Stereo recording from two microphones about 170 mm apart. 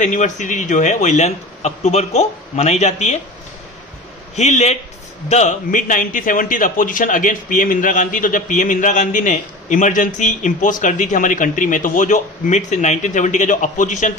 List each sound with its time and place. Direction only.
0.0 s a man's voice: 45° left (ahead or behind)
4.4 s a man's voice: 40° left (ahead or behind)